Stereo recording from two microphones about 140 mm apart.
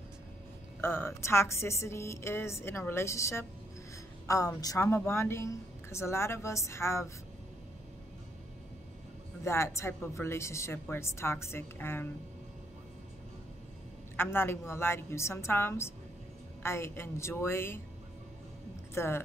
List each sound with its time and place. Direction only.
0.7 s speech: 20° left (ahead or behind)
9.4 s speech: 20° left (ahead or behind)
14.1 s a woman's voice: 15° left (ahead or behind)
18.9 s a woman's voice: 15° left (ahead or behind)